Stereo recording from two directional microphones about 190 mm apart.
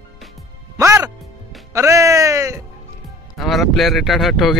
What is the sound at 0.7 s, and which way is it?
Music, 15° right (ahead or behind).